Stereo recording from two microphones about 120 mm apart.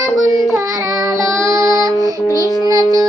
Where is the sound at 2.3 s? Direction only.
30° right (ahead or behind).